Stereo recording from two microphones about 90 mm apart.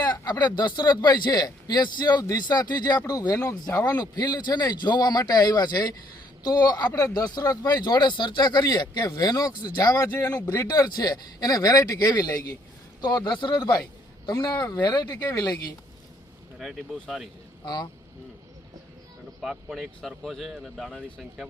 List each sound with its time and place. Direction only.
0.0 s speech: 50° left (ahead or behind)
3.3 s speech: 35° left (ahead or behind)
10.1 s speech: 25° left (ahead or behind)
10.7 s speech: 45° left (ahead or behind)
14.3 s speech: 35° left (ahead or behind)
14.5 s speech: 45° left (ahead or behind)
16.6 s speech: 5° right (ahead or behind)
19.4 s speech: 5° right (ahead or behind)